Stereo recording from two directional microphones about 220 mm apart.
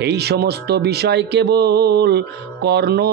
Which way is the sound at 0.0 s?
50° right (ahead or behind).